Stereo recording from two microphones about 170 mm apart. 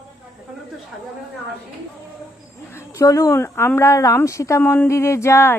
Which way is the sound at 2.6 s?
15° left (ahead or behind).